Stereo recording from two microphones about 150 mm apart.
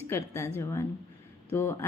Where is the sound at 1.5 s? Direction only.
15° left (ahead or behind).